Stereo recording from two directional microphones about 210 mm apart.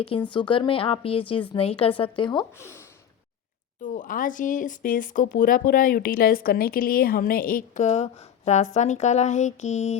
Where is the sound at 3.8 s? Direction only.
35° left (ahead or behind).